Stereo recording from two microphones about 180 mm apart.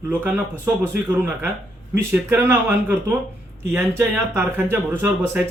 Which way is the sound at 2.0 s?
10° right (ahead or behind).